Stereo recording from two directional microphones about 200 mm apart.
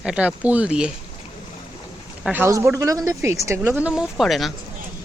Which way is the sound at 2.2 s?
10° right (ahead or behind).